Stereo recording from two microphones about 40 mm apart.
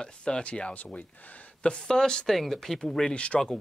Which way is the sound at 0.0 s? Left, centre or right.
Left.